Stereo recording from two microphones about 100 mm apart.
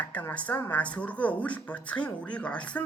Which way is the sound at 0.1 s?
15° left (ahead or behind).